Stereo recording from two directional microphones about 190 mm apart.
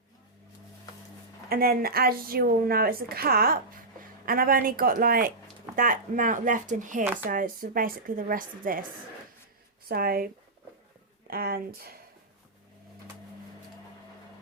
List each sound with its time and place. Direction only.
1.5 s a woman's voice: 50° right (ahead or behind)
9.9 s a woman's voice: 50° right (ahead or behind)
11.3 s a woman's voice: 50° right (ahead or behind)